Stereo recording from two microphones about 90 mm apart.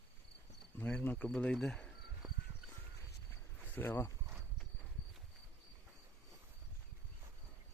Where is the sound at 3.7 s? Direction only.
20° left (ahead or behind).